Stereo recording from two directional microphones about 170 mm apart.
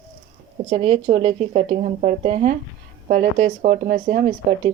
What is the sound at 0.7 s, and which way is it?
Speech, 35° right (ahead or behind).